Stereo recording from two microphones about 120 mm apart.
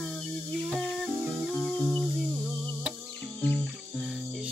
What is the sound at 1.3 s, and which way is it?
Music, 5° right (ahead or behind).